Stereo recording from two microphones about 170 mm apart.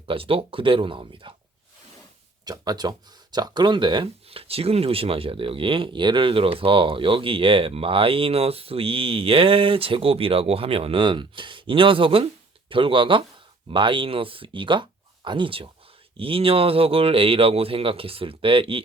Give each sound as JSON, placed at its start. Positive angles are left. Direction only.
{"t": 0.0, "sound": "speech", "side_deg": -35}
{"t": 2.4, "sound": "speech", "side_deg": -25}